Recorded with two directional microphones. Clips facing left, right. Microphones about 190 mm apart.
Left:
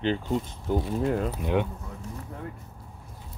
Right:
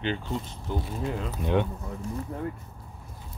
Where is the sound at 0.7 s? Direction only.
50° left (ahead or behind).